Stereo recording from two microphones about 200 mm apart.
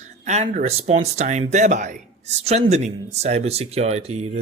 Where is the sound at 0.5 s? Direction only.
30° right (ahead or behind).